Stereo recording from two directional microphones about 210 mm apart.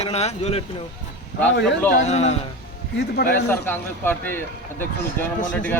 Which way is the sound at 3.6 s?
10° left (ahead or behind).